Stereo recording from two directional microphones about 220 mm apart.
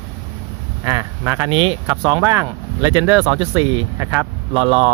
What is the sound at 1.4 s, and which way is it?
Speech, 25° right (ahead or behind).